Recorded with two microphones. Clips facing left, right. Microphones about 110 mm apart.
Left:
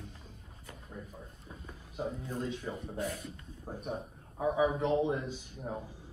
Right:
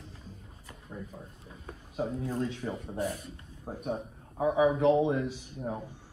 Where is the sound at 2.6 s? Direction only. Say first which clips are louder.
Right 4 dB; 45° right (ahead or behind).